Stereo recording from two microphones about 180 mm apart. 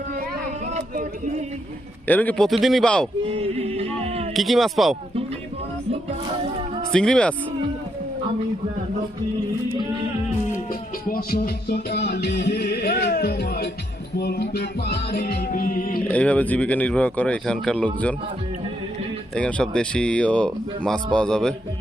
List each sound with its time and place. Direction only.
2.0 s speech: 10° left (ahead or behind)
3.2 s music: 35° right (ahead or behind)
4.4 s speech: centre (ahead or behind)
6.9 s speech: 5° left (ahead or behind)
10.7 s music: 50° left (ahead or behind)
16.0 s speech: 10° left (ahead or behind)
19.4 s speech: 5° left (ahead or behind)